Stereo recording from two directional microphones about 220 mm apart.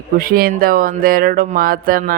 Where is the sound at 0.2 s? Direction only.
40° right (ahead or behind).